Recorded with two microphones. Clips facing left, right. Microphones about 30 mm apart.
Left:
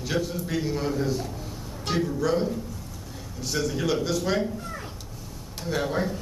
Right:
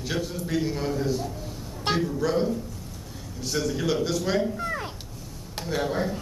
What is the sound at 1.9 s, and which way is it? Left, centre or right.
Music, right.